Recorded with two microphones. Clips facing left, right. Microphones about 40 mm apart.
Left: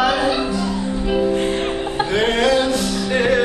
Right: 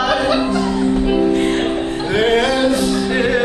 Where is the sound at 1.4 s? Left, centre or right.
Right.